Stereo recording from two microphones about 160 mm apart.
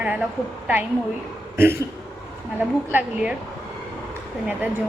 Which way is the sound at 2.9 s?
10° right (ahead or behind).